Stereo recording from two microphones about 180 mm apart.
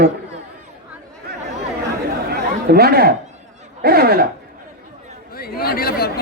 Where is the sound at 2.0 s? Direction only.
60° right (ahead or behind).